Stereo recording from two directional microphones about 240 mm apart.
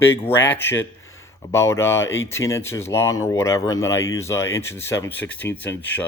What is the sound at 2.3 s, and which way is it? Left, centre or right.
Speech, centre.